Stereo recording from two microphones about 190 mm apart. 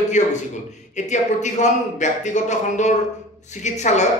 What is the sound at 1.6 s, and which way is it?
Speech, 40° left (ahead or behind).